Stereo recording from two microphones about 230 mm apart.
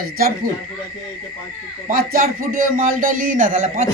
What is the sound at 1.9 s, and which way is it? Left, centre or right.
A man's voice, right.